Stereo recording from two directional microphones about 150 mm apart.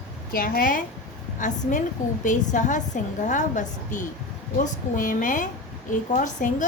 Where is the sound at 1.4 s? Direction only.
55° left (ahead or behind).